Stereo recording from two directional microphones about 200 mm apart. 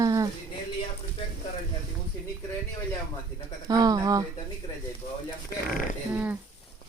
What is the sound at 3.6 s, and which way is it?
Speech, 20° right (ahead or behind).